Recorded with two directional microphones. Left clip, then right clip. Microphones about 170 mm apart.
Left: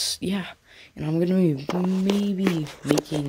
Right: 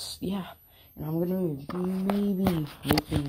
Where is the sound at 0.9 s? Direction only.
40° left (ahead or behind).